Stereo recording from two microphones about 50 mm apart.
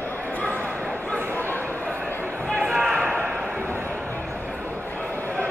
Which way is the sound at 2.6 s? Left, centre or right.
Centre.